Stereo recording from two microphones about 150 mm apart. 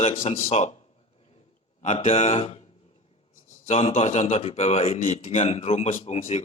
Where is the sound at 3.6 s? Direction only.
45° left (ahead or behind).